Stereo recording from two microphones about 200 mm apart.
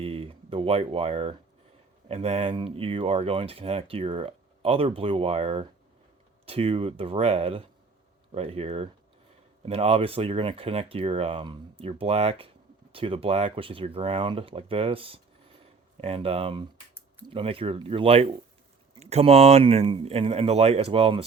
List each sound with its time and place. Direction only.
0.0 s speech: 30° right (ahead or behind)